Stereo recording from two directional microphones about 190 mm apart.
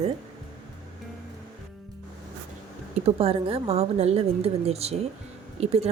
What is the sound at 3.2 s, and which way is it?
A woman's voice, 30° right (ahead or behind).